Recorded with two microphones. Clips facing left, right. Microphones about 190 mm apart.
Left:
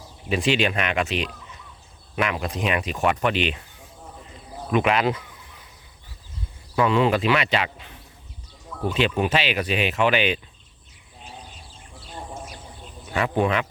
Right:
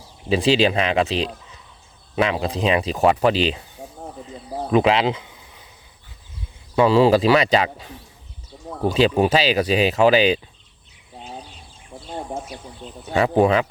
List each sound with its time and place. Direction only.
0.3 s speech: 35° right (ahead or behind)
3.8 s snake: 40° right (ahead or behind)
4.7 s speech: 30° right (ahead or behind)
6.7 s speech: 30° right (ahead or behind)
11.9 s a sound: 50° right (ahead or behind)
13.1 s speech: 35° right (ahead or behind)